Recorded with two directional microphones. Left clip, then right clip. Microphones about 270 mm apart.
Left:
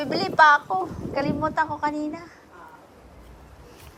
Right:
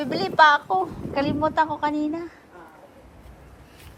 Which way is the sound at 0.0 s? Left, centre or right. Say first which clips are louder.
Even; centre.